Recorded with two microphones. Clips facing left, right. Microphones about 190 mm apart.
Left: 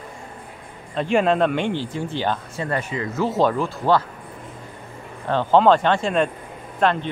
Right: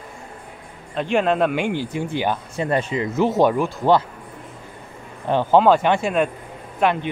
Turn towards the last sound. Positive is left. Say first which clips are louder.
# even
turn(degrees=-5)  # may be behind; listen again after turning